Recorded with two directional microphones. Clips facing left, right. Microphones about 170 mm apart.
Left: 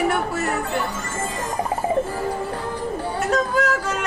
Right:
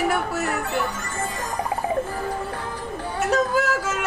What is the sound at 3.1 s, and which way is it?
Yodeling, 5° right (ahead or behind).